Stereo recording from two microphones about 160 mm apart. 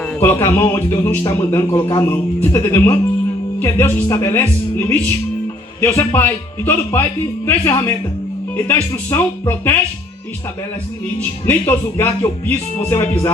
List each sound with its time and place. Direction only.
0.0 s a man's voice: 15° left (ahead or behind)
5.8 s speech: 15° left (ahead or behind)
11.4 s speech: 15° left (ahead or behind)